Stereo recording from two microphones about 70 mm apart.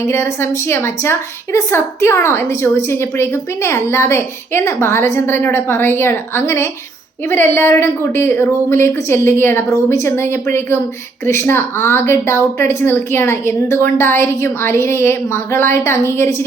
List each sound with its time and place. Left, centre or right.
0.7 s a woman's voice: left